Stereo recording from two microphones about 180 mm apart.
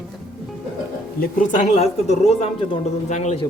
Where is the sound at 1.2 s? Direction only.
40° left (ahead or behind).